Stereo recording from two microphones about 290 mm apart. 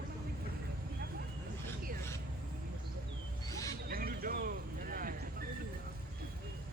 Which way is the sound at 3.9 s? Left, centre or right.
Right.